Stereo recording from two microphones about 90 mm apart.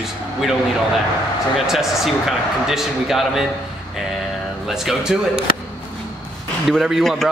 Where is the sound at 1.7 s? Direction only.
5° right (ahead or behind).